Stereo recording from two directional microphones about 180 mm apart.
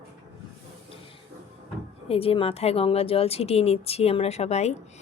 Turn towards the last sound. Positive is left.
turn(degrees=35)  # may be behind; listen again after turning